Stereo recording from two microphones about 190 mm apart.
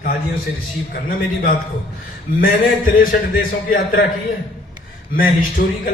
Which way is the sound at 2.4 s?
45° left (ahead or behind).